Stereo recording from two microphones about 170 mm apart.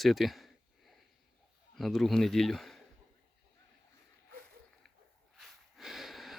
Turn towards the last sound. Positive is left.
turn(degrees=0)  # may be behind; listen again after turning